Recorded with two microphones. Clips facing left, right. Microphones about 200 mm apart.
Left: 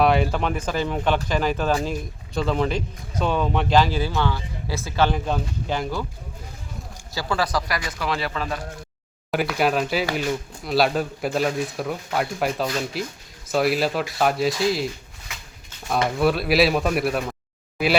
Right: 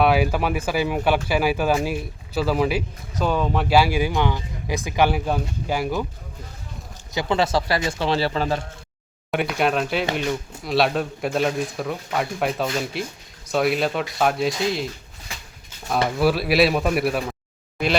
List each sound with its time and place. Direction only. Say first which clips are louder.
0.0 s speech: right 1 dB; 5° right (ahead or behind)
7.1 s speech: right 3 dB; 20° right (ahead or behind)
9.6 s speech: even; centre (ahead or behind)
15.9 s speech: right 1 dB; centre (ahead or behind)